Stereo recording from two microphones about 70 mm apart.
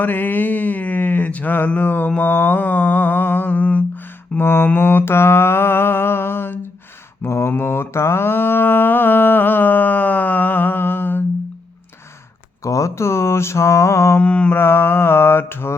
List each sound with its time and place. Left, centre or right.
0.0 s a sound: left
7.2 s mantra: left
12.6 s mantra: left
14.2 s mantra: centre
14.5 s mantra: left